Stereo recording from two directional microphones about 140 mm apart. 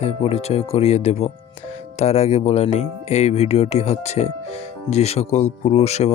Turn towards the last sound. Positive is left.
turn(degrees=50)  # may be behind; listen again after turning